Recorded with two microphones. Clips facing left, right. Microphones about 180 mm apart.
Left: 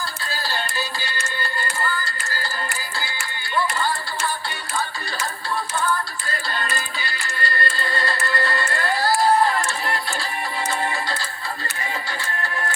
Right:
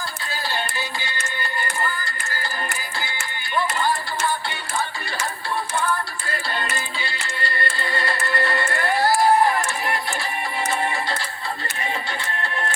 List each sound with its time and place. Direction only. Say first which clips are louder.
0.3 s music: right 1 dB; 20° right (ahead or behind)
3.5 s music: right 1 dB; 20° right (ahead or behind)
6.3 s music: even; 25° right (ahead or behind)
12.4 s music: even; 25° right (ahead or behind)